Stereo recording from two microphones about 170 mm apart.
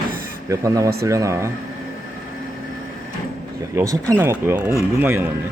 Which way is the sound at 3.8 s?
20° right (ahead or behind).